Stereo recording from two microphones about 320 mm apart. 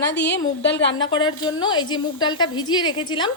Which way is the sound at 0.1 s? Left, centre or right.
Left.